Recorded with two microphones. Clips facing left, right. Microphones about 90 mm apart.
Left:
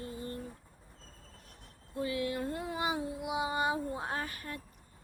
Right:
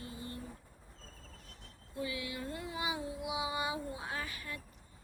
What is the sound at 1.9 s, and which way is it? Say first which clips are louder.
Female singing: left 6 dB; 45° left (ahead or behind).